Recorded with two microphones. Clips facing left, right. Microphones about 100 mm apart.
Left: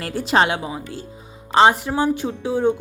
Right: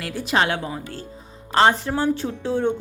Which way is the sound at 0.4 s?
15° left (ahead or behind).